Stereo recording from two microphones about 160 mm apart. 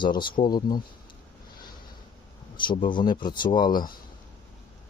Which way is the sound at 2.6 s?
30° left (ahead or behind).